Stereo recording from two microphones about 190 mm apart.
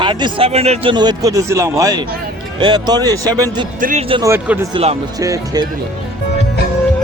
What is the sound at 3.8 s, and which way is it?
Speech, 45° right (ahead or behind).